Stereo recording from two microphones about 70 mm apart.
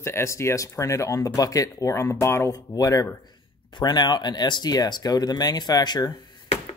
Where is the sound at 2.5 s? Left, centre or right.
Left.